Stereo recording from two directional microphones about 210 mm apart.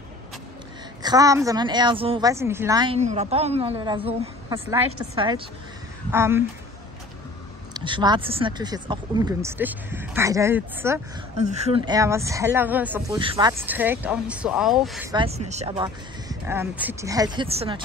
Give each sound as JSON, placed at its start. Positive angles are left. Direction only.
{"t": 1.0, "sound": "a woman's voice", "side_deg": -15}
{"t": 3.0, "sound": "a woman's voice", "side_deg": -30}
{"t": 7.7, "sound": "speech", "side_deg": -20}
{"t": 11.3, "sound": "a woman's voice", "side_deg": -30}
{"t": 13.1, "sound": "speech", "side_deg": -20}
{"t": 13.7, "sound": "speech", "side_deg": -10}
{"t": 15.0, "sound": "speech", "side_deg": -25}